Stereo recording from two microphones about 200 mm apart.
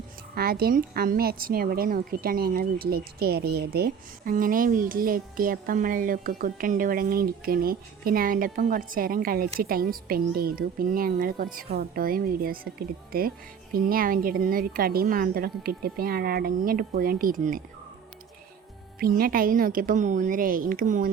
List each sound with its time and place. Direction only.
0.3 s a woman's voice: 50° right (ahead or behind)
18.9 s a woman's voice: 50° right (ahead or behind)